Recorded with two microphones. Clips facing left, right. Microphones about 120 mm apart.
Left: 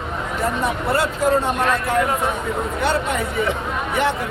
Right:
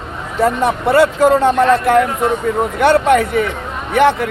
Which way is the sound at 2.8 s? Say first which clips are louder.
Right 11 dB; 70° right (ahead or behind).